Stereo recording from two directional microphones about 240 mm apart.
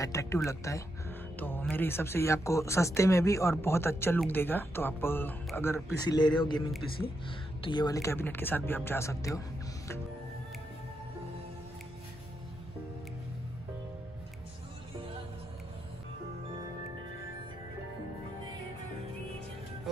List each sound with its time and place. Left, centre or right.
0.0 s speech: centre